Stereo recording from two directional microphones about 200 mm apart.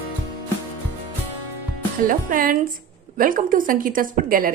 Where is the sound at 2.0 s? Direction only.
45° right (ahead or behind).